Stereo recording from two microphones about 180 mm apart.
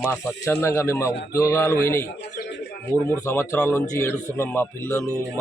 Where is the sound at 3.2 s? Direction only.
15° left (ahead or behind).